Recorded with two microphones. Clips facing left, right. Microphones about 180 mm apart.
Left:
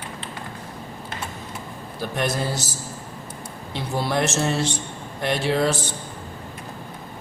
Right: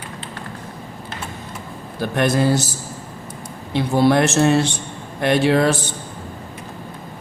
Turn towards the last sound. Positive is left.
turn(degrees=-60)  # may be behind; listen again after turning